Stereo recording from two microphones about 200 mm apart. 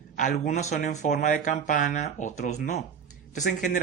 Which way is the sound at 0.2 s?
40° left (ahead or behind).